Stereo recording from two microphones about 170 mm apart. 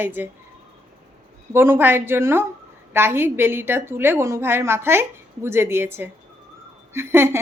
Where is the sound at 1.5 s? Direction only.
15° right (ahead or behind).